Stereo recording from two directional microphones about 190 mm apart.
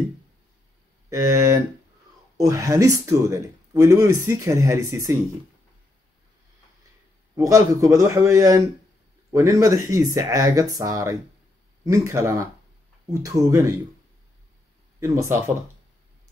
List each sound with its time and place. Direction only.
1.1 s speech: 15° right (ahead or behind)
7.3 s speech: 15° right (ahead or behind)
15.0 s speech: 15° right (ahead or behind)